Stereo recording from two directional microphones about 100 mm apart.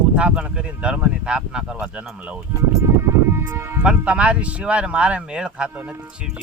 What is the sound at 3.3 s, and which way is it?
Speech, 25° right (ahead or behind).